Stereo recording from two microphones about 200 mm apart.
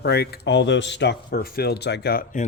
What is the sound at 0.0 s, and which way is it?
Speech, 55° left (ahead or behind).